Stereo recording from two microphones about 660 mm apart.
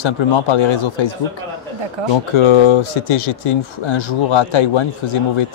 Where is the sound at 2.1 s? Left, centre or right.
Left.